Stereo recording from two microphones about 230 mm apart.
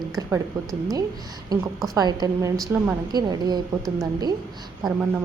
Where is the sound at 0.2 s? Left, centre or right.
Centre.